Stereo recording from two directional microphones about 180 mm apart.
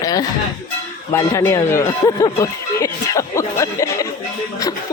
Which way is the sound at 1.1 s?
15° left (ahead or behind).